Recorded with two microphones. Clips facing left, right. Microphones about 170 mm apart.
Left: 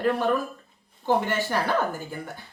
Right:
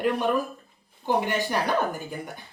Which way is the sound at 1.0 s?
15° right (ahead or behind).